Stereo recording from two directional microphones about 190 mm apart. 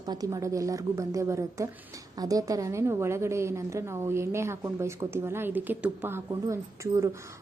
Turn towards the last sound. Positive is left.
turn(degrees=-15)  # may be behind; listen again after turning